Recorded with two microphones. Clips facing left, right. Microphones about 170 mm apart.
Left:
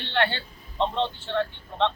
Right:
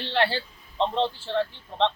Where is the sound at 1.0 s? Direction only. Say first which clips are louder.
Right 1 dB; 5° right (ahead or behind).